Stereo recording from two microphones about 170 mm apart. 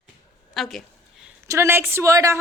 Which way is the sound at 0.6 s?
Centre (ahead or behind).